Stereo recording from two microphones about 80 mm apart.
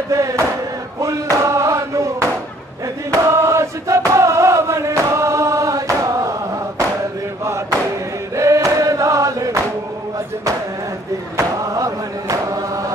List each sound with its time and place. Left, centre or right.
0.1 s a sound: right
1.3 s chant: right
8.4 s chant: right
11.3 s chant: right